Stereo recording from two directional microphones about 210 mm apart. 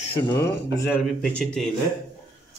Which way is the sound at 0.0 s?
25° left (ahead or behind).